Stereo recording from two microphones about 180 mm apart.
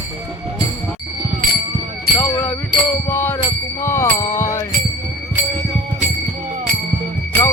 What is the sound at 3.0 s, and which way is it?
Music, 10° left (ahead or behind).